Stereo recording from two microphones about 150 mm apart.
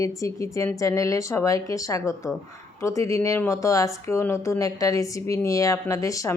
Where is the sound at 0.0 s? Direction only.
20° left (ahead or behind).